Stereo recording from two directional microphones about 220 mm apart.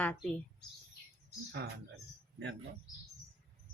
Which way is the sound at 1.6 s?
50° right (ahead or behind).